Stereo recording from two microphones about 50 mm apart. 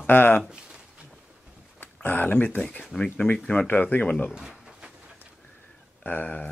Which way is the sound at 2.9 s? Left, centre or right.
Centre.